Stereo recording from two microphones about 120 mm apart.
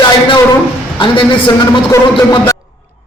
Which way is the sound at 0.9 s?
45° left (ahead or behind).